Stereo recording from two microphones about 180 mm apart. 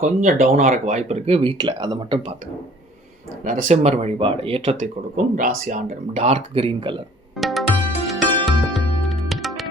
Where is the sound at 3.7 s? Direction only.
35° right (ahead or behind).